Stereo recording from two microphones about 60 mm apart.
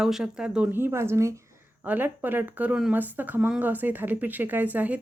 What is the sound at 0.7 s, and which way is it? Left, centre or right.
Speech, right.